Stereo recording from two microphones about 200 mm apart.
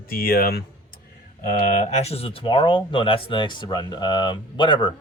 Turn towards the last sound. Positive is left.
turn(degrees=25)  # may be behind; listen again after turning